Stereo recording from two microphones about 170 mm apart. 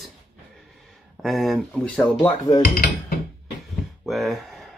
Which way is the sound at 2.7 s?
60° left (ahead or behind).